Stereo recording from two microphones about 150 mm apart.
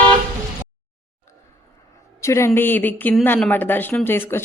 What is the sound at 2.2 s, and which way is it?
A man's voice, 20° left (ahead or behind).